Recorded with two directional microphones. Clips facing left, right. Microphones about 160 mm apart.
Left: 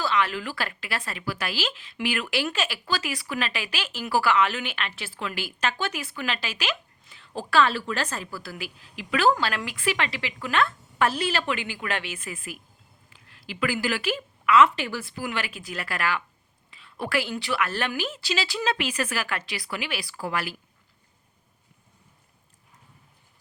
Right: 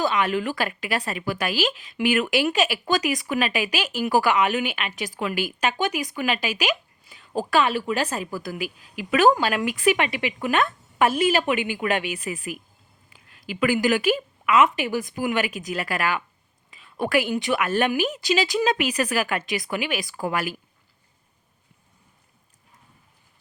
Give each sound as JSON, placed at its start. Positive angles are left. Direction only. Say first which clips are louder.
{"t": 0.0, "sound": "speech", "louder": "right 3 dB", "side_deg": -20}